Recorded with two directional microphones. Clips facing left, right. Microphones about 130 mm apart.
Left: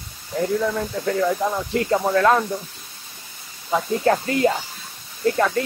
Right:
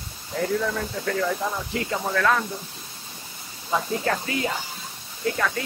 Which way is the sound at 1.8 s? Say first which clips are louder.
Left 8 dB; 35° left (ahead or behind).